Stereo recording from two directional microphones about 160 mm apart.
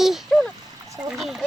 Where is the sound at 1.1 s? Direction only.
Centre (ahead or behind).